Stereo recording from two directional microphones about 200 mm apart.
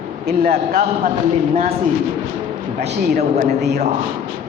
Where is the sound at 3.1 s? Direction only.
35° right (ahead or behind).